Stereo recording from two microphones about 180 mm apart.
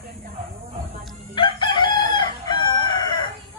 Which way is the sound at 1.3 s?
25° left (ahead or behind).